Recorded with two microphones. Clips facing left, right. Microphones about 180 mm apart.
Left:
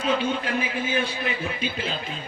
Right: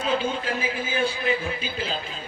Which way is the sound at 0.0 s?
35° right (ahead or behind).